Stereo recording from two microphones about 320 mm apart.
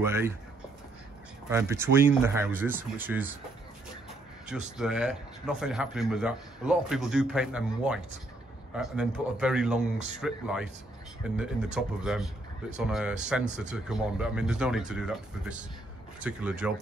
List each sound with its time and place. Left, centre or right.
0.0 s speech: centre
1.5 s speech: centre
4.5 s speech: centre
9.9 s speech: right
10.2 s speech: centre